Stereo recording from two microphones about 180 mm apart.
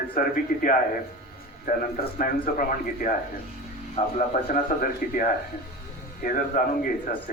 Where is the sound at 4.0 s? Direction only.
40° left (ahead or behind).